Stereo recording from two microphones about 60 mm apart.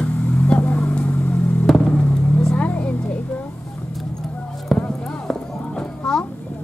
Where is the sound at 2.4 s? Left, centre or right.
Centre.